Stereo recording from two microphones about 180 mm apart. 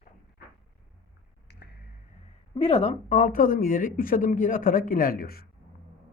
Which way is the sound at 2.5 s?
35° left (ahead or behind).